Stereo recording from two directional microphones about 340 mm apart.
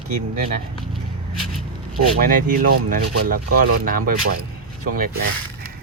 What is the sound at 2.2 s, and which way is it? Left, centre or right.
Speech, right.